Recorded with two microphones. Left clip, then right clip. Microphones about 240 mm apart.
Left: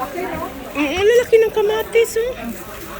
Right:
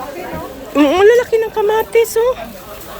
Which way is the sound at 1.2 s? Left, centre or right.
Centre.